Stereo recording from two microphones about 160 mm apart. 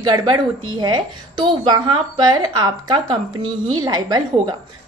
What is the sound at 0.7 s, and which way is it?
A woman's voice, 25° right (ahead or behind).